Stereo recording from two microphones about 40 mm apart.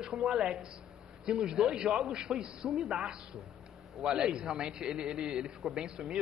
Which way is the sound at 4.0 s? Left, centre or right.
Centre.